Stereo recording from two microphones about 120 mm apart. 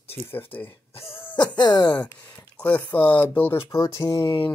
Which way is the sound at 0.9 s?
50° left (ahead or behind).